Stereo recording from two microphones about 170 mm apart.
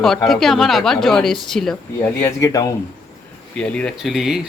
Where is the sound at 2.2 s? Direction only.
15° left (ahead or behind).